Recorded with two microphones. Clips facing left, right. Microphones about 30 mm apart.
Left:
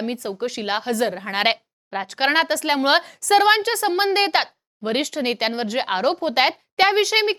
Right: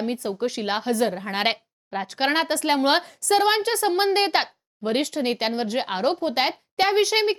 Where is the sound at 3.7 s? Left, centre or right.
Centre.